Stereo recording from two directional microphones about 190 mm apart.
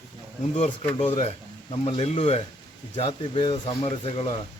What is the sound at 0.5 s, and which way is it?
A man's voice, 35° left (ahead or behind).